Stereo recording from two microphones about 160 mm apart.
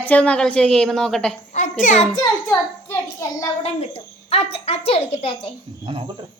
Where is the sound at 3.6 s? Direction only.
40° left (ahead or behind).